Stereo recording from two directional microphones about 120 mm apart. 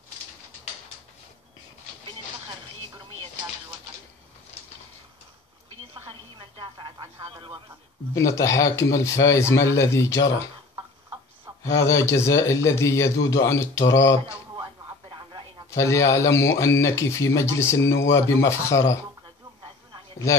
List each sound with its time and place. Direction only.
6.6 s radio: 35° right (ahead or behind)
7.2 s a sound: 45° right (ahead or behind)
8.1 s speech: 25° left (ahead or behind)
11.6 s speech: 25° left (ahead or behind)
14.6 s radio: 40° right (ahead or behind)
15.7 s speech: 25° left (ahead or behind)